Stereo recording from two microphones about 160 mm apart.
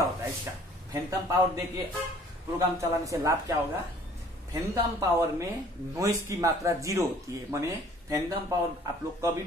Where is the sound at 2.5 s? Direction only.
20° right (ahead or behind).